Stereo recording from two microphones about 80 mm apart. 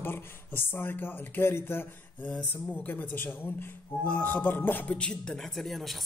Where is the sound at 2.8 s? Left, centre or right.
Left.